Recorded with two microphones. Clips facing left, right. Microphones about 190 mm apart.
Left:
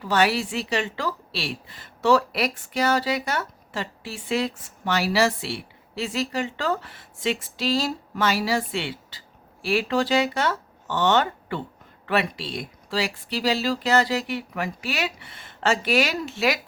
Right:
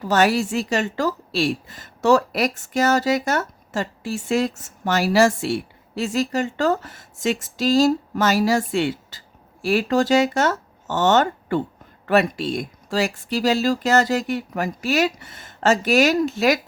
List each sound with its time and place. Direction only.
0.0 s a woman's voice: 45° right (ahead or behind)